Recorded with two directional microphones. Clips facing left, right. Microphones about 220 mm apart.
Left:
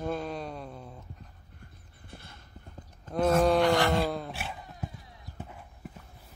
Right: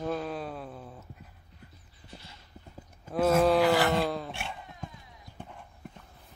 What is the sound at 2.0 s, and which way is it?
Clip-clop, 55° left (ahead or behind).